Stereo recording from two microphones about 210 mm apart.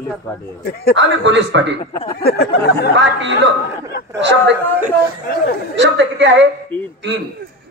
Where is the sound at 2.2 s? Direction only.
50° left (ahead or behind).